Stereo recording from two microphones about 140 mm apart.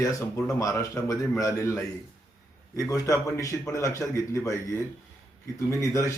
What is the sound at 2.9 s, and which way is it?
Speech, 20° left (ahead or behind).